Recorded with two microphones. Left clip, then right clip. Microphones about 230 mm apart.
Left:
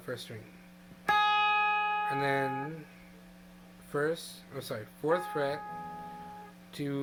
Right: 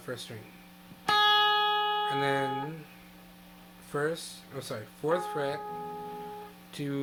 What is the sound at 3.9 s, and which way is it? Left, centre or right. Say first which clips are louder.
Speech: even; centre.